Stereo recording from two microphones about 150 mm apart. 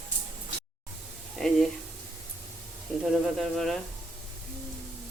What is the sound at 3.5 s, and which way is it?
Speech, centre (ahead or behind).